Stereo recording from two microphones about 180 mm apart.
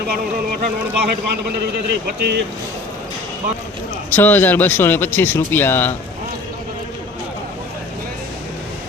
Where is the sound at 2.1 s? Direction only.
70° right (ahead or behind).